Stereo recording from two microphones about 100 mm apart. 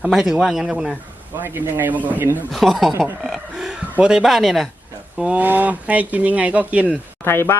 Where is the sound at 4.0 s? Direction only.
5° right (ahead or behind).